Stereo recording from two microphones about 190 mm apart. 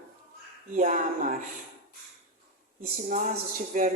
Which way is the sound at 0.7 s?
40° right (ahead or behind).